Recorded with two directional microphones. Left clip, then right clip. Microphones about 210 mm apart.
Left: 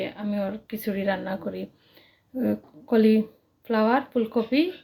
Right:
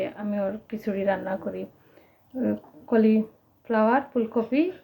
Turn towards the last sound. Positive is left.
turn(degrees=20)  # may be behind; listen again after turning